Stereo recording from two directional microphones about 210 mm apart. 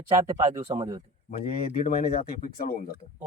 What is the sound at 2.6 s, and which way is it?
Speech, 45° left (ahead or behind).